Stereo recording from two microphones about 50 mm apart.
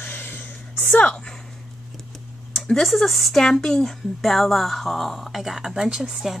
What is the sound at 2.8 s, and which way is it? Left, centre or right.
A woman's voice, centre.